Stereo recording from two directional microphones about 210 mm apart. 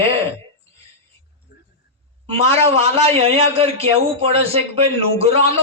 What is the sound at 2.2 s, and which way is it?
A man's voice, 30° right (ahead or behind).